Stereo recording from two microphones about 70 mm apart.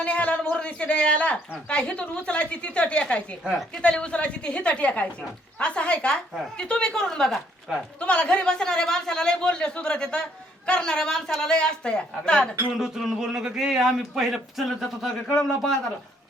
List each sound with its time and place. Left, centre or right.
0.0 s a woman's voice: centre
8.0 s a woman's voice: centre
12.8 s speech: centre